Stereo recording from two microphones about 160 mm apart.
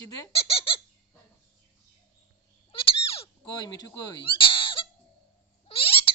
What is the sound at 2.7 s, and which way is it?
Cat, 35° left (ahead or behind).